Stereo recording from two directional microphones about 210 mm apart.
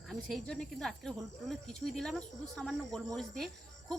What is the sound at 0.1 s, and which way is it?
Speech, centre (ahead or behind).